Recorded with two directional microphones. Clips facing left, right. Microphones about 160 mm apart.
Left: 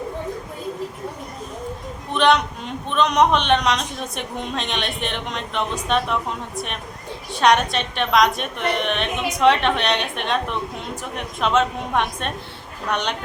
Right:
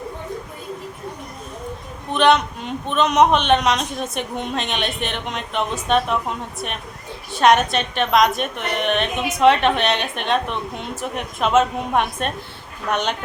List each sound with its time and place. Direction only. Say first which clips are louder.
2.1 s a man's voice: right 1 dB; centre (ahead or behind)
7.3 s a woman's voice: right 2 dB; centre (ahead or behind)